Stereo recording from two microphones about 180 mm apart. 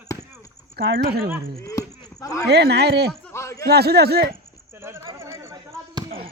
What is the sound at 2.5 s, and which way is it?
Speech, 65° right (ahead or behind).